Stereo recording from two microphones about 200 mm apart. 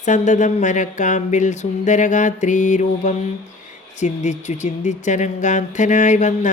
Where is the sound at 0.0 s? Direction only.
40° left (ahead or behind).